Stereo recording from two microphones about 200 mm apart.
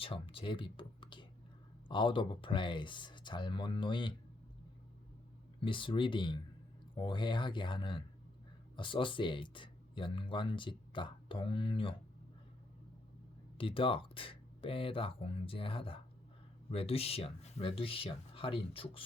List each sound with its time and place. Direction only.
0.0 s speech: 25° left (ahead or behind)
5.5 s speech: 25° left (ahead or behind)
13.6 s speech: 25° left (ahead or behind)